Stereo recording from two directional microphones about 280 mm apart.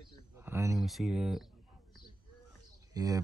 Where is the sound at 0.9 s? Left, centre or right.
Centre.